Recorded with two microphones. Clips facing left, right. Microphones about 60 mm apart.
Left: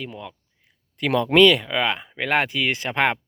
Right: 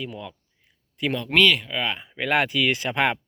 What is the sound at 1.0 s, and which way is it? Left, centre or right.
Speech, left.